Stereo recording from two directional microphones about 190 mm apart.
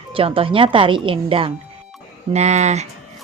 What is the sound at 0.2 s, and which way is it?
A woman's voice, 30° right (ahead or behind).